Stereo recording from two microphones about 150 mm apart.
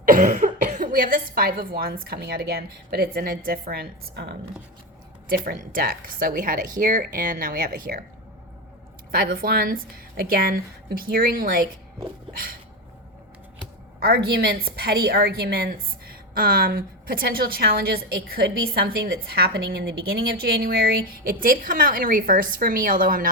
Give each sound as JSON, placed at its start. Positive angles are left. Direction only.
{"t": 0.0, "sound": "speech", "side_deg": -65}
{"t": 5.3, "sound": "speech", "side_deg": -75}
{"t": 9.1, "sound": "speech", "side_deg": -80}
{"t": 14.0, "sound": "a woman's voice", "side_deg": -90}
{"t": 21.4, "sound": "a woman's voice", "side_deg": -70}